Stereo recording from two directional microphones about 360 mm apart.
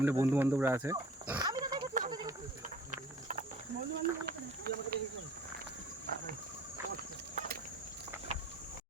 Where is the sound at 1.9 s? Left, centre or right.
Centre.